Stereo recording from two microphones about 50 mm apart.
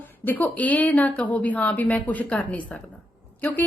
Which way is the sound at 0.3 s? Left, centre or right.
Left.